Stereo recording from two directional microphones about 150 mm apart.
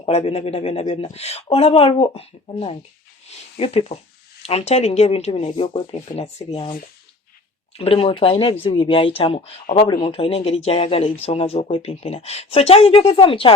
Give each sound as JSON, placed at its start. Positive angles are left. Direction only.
{"t": 0.0, "sound": "speech", "side_deg": 40}
{"t": 7.8, "sound": "speech", "side_deg": 40}